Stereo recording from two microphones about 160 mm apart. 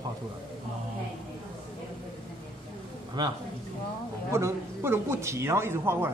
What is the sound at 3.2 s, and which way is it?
Speech, 25° right (ahead or behind).